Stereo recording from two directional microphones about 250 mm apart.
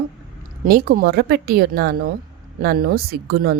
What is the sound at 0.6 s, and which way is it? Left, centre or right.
Speech, right.